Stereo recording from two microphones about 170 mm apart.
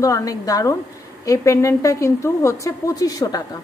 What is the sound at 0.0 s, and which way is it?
A woman's voice, 20° left (ahead or behind).